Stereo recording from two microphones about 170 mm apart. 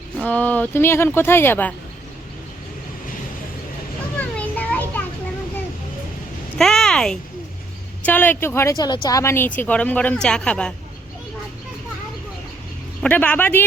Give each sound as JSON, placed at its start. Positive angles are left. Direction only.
{"t": 0.3, "sound": "speech", "side_deg": 10}
{"t": 4.2, "sound": "children playing", "side_deg": 10}
{"t": 6.6, "sound": "speech", "side_deg": 0}
{"t": 13.0, "sound": "speech", "side_deg": 10}